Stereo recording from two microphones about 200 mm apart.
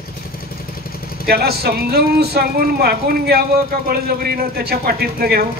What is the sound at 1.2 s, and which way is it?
Speech, 50° right (ahead or behind).